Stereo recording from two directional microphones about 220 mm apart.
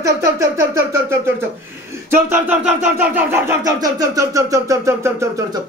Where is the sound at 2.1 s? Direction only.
10° right (ahead or behind).